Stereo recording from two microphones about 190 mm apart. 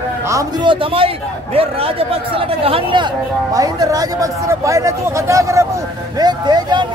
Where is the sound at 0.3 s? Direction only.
20° right (ahead or behind).